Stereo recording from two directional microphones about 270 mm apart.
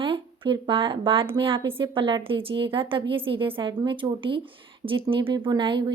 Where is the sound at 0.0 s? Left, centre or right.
Centre.